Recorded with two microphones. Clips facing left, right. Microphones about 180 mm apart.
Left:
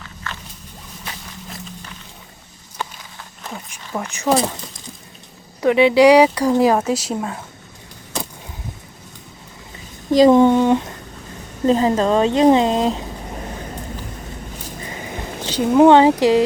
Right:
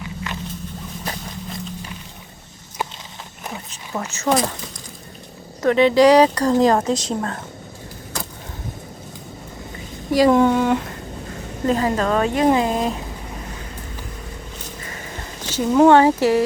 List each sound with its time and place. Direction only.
0.3 s a sound: 15° right (ahead or behind)
4.0 s speech: 15° left (ahead or behind)
5.6 s speech: 15° left (ahead or behind)
10.1 s speech: 20° left (ahead or behind)
15.4 s speech: 15° left (ahead or behind)